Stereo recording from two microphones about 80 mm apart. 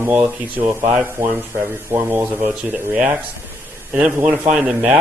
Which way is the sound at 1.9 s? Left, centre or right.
Right.